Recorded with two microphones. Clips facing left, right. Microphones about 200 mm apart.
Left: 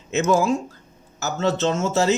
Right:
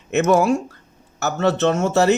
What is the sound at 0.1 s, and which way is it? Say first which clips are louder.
A man's voice: right 3 dB; 65° right (ahead or behind).